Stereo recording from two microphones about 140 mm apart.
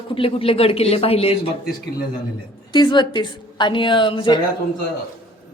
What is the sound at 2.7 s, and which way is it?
A woman's voice, 35° left (ahead or behind).